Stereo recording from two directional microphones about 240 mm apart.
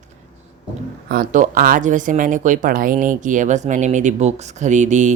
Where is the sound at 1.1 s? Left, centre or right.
Right.